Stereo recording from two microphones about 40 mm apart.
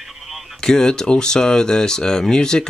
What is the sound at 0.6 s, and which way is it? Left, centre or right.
Speech, centre.